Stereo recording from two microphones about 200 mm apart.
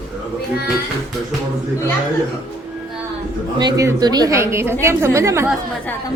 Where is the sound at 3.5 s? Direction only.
20° right (ahead or behind).